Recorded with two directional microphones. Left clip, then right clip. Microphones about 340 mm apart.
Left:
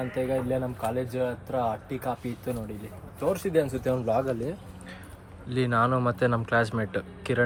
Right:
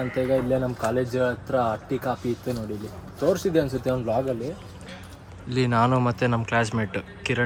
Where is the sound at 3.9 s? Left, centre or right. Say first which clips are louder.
Right 1 dB; centre.